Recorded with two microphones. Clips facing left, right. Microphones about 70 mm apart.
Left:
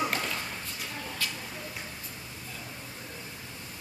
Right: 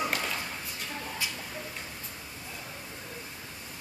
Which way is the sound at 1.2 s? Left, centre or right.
Centre.